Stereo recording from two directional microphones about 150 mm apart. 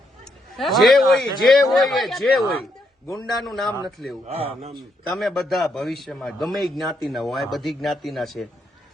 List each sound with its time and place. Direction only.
0.5 s a man's voice: centre (ahead or behind)
4.3 s speech: 40° right (ahead or behind)
4.7 s a man's voice: centre (ahead or behind)